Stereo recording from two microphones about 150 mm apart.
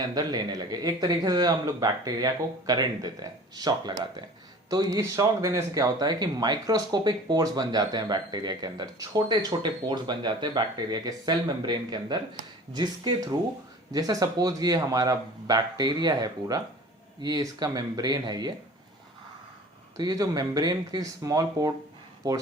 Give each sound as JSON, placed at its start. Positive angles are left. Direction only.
{"t": 0.0, "sound": "speech", "side_deg": -25}
{"t": 20.0, "sound": "speech", "side_deg": -25}